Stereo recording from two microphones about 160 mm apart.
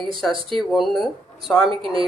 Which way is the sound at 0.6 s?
Centre (ahead or behind).